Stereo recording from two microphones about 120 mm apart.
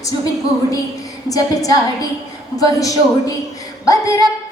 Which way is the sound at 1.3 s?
30° left (ahead or behind).